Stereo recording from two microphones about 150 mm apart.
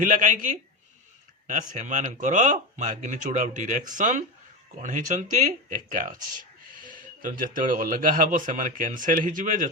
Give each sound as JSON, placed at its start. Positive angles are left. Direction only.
{"t": 0.0, "sound": "speech", "side_deg": -60}
{"t": 1.5, "sound": "speech", "side_deg": -55}